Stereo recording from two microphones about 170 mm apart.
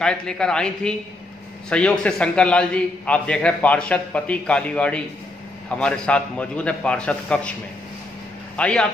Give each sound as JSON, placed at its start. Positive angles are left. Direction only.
{"t": 0.0, "sound": "a man's voice", "side_deg": 5}
{"t": 8.5, "sound": "a man's voice", "side_deg": 5}